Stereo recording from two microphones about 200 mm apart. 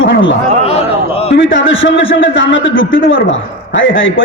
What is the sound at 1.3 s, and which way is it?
A man's voice, 70° left (ahead or behind).